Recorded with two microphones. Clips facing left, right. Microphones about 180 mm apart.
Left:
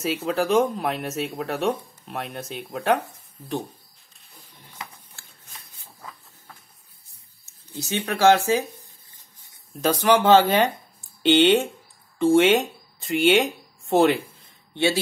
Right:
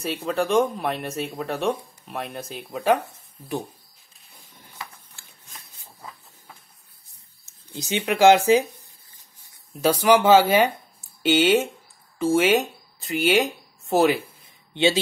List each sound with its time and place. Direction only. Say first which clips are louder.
0.3 s speech: even; centre (ahead or behind)
7.7 s speech: right 2 dB; 20° right (ahead or behind)
9.8 s speech: right 1 dB; 10° right (ahead or behind)
14.7 s speech: right 2 dB; 20° right (ahead or behind)